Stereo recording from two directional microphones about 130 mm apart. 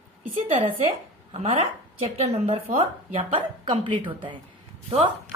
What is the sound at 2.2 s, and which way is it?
A woman's voice, 50° right (ahead or behind).